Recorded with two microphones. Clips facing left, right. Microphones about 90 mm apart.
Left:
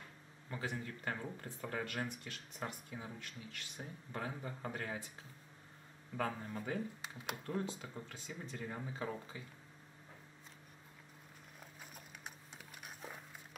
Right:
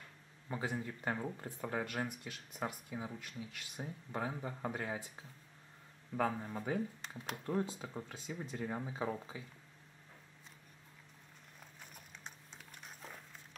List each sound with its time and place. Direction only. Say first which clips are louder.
0.5 s speech: right 3 dB; 20° right (ahead or behind)
6.1 s speech: right 4 dB; 10° right (ahead or behind)
7.0 s speech: even; 5° left (ahead or behind)
7.4 s speech: right 5 dB; 15° right (ahead or behind)
11.8 s a sound: even; 5° left (ahead or behind)